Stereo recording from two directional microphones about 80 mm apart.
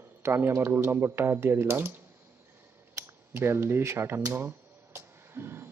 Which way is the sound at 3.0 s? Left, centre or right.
Right.